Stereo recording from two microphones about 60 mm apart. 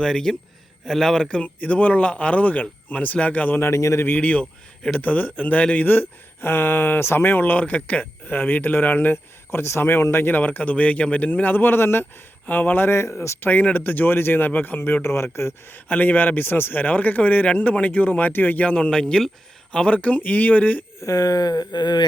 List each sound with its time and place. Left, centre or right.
0.0 s speech: centre
1.6 s speech: left
3.6 s speech: left
4.1 s speech: left
12.9 s speech: left
13.4 s speech: left
15.7 s speech: left; by 19.3 s centre
19.7 s speech: centre
21.0 s a sound: left